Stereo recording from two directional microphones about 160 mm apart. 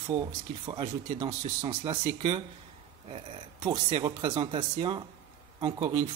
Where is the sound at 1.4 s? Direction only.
45° right (ahead or behind).